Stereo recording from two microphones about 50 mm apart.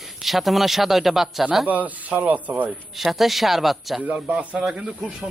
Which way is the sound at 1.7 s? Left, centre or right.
Right.